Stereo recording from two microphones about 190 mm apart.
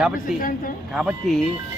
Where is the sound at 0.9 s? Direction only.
Centre (ahead or behind).